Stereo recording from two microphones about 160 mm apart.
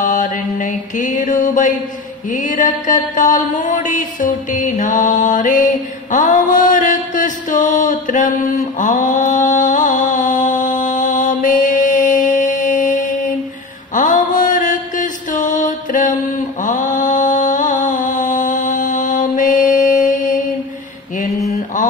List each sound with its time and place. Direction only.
0.0 s mantra: 55° left (ahead or behind)